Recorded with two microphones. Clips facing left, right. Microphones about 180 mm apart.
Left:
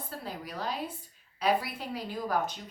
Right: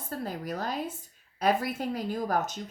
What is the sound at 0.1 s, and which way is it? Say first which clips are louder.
A woman's voice: right 8 dB; 45° right (ahead or behind).